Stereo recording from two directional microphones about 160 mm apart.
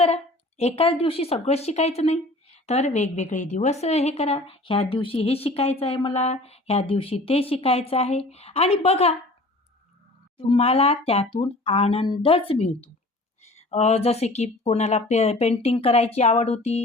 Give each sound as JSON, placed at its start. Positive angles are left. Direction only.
{"t": 0.1, "sound": "a woman's voice", "side_deg": 40}
{"t": 10.3, "sound": "a woman's voice", "side_deg": 35}